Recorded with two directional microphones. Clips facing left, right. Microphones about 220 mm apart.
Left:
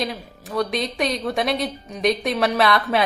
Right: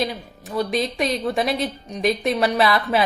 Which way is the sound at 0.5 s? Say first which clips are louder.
Right 1 dB; centre (ahead or behind).